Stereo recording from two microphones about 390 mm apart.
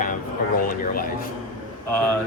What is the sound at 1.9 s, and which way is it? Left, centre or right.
Speech, right.